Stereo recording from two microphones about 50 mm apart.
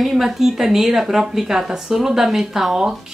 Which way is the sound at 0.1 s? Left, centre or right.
Centre.